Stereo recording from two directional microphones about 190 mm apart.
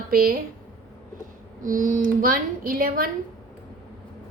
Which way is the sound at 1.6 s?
45° right (ahead or behind).